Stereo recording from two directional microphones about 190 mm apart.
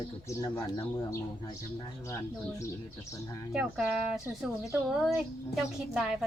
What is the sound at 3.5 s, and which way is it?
Speech, 5° right (ahead or behind).